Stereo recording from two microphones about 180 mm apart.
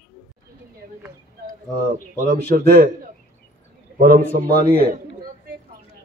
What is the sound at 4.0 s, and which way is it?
Speech, 60° right (ahead or behind).